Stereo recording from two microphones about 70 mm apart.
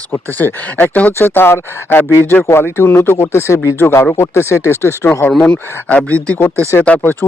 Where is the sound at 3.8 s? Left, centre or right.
Left.